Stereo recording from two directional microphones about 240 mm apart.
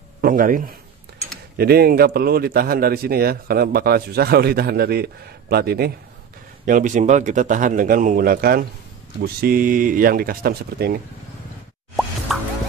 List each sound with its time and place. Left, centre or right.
0.2 s a man's voice: right
12.3 s music: centre